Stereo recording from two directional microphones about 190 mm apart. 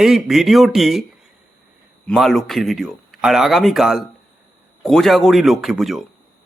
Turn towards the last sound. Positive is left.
turn(degrees=0)  # may be behind; listen again after turning